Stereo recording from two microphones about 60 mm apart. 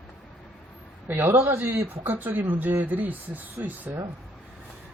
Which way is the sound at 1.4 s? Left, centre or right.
Right.